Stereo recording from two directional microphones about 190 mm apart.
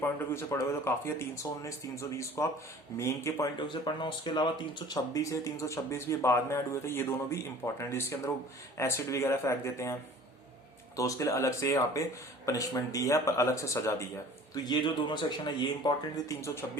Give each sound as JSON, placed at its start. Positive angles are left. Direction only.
{"t": 0.0, "sound": "speech", "side_deg": 15}